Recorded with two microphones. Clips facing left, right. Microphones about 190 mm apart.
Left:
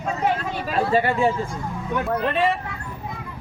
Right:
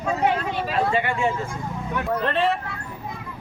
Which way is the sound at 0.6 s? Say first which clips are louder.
Left 4 dB; 40° left (ahead or behind).